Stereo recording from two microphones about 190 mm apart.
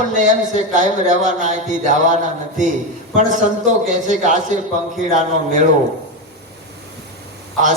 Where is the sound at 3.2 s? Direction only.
40° right (ahead or behind).